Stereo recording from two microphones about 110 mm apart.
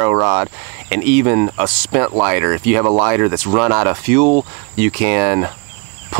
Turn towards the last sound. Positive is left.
turn(degrees=-25)  # may be behind; listen again after turning